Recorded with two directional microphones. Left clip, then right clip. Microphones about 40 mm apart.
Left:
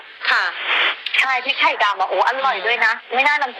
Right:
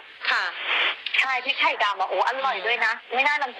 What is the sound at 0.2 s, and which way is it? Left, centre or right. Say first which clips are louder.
A woman's voice: left 6 dB; left.